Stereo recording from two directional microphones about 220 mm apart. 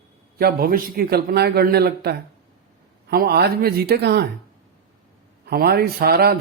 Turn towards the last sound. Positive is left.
turn(degrees=-45)  # may be behind; listen again after turning